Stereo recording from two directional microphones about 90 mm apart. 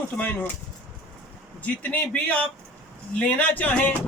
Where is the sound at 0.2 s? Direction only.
20° left (ahead or behind).